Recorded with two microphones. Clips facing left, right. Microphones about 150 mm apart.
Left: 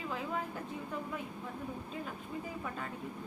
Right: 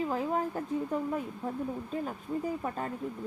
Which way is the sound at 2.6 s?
40° right (ahead or behind).